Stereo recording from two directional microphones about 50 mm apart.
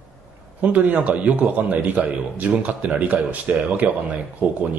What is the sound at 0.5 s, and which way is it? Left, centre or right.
A man's voice, right.